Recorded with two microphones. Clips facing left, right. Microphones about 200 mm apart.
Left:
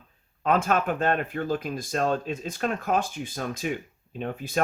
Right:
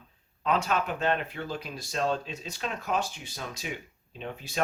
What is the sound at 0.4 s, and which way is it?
Speech, 50° left (ahead or behind).